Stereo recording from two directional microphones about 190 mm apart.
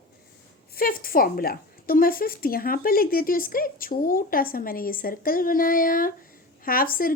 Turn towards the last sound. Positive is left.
turn(degrees=50)  # may be behind; listen again after turning